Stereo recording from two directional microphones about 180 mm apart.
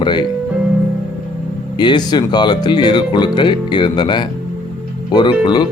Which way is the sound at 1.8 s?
25° left (ahead or behind).